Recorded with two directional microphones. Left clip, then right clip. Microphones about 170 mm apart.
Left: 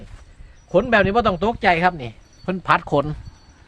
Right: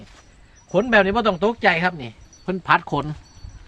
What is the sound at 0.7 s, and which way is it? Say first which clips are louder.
Speech: left 1 dB; 50° left (ahead or behind).